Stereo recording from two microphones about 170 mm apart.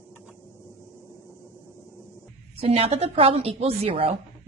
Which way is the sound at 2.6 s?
35° right (ahead or behind).